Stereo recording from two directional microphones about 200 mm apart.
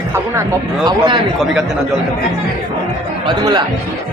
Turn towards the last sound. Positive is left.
turn(degrees=-20)  # may be behind; listen again after turning